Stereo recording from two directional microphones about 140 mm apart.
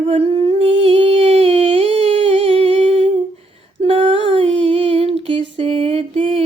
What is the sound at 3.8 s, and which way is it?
Humming, 45° right (ahead or behind).